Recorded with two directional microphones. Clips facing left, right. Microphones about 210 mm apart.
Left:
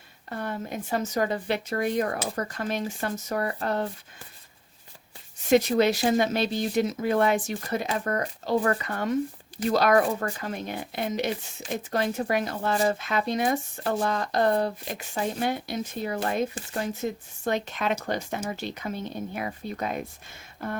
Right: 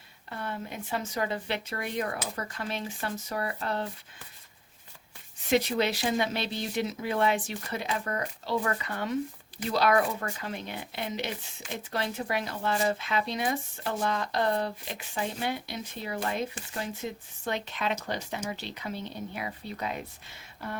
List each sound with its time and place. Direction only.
0.3 s a woman's voice: 45° left (ahead or behind)
5.5 s speech: 45° left (ahead or behind)